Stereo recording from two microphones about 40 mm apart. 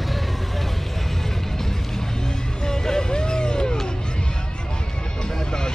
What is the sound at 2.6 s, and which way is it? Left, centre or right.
Music, centre.